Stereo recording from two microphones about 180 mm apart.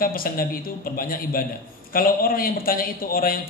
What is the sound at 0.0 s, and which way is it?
A man's voice, 55° left (ahead or behind).